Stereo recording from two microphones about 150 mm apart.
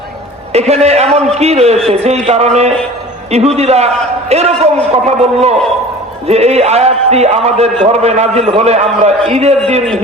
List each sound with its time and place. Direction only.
0.5 s a man's voice: 45° right (ahead or behind)